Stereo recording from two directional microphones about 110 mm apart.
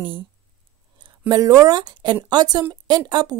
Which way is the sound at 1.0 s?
35° right (ahead or behind).